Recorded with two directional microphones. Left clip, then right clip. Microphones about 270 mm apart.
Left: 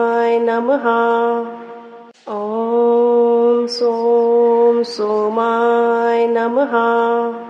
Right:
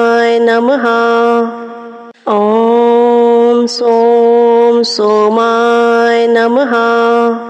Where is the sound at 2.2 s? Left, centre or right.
Right.